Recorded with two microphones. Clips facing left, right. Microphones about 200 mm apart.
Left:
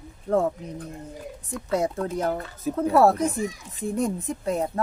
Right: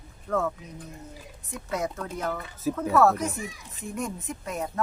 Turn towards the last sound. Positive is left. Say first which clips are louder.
# left 6 dB
turn(degrees=30)  # may be behind; listen again after turning